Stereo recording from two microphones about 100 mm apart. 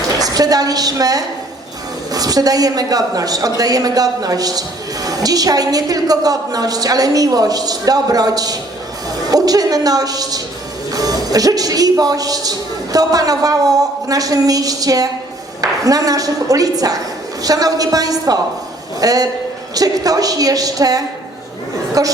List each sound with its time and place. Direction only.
0.2 s a woman's voice: 40° right (ahead or behind)